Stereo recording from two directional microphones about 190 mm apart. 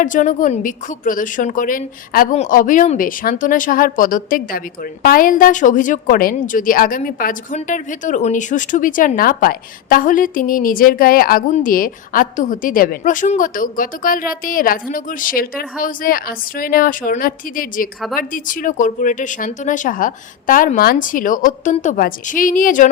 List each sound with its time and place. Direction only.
0.0 s a woman's voice: 45° left (ahead or behind)